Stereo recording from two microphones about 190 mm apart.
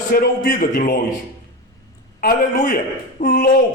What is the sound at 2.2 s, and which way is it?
A man's voice, 50° left (ahead or behind).